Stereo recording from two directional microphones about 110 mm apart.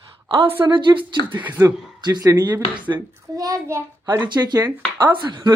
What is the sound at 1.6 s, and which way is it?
A child's voice, 35° right (ahead or behind).